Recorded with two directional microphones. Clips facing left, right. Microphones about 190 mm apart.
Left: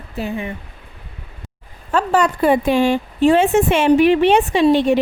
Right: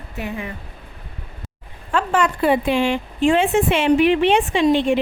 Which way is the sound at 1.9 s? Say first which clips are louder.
Left 3 dB; 35° left (ahead or behind).